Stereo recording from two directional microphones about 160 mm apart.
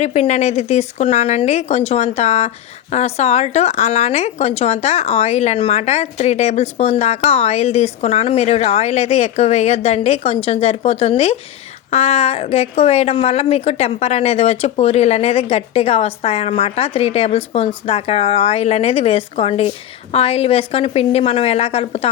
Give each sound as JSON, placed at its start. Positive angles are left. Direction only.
{"t": 0.0, "sound": "a woman's voice", "side_deg": 45}